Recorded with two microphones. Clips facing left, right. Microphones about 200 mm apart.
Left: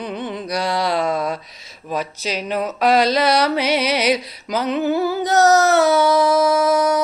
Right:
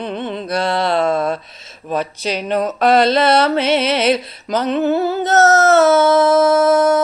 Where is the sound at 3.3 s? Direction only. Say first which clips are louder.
Right 3 dB; 25° right (ahead or behind).